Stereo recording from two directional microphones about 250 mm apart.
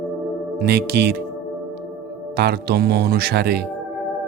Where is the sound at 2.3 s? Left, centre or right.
Right.